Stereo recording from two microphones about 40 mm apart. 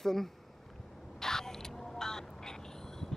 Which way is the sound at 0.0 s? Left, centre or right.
Centre.